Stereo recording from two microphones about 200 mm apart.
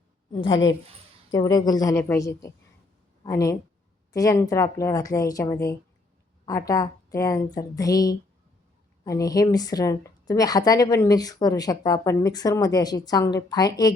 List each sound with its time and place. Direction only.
0.4 s a woman's voice: 25° left (ahead or behind)